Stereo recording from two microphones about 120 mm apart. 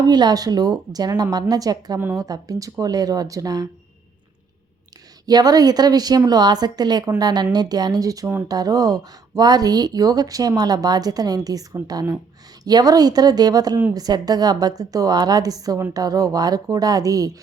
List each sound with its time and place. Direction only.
0.0 s speech: 35° right (ahead or behind)
5.2 s speech: 35° right (ahead or behind)